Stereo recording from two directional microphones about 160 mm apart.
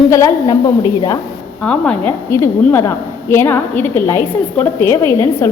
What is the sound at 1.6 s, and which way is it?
A woman's voice, 5° left (ahead or behind).